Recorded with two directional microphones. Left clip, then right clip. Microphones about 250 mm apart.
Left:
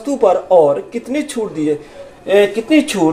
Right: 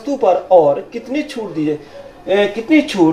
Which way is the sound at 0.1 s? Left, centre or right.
Left.